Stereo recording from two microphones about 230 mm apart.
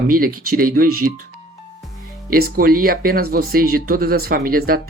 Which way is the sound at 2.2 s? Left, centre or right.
Right.